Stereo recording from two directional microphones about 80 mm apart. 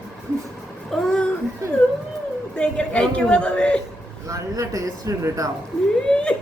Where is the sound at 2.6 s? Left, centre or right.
Centre.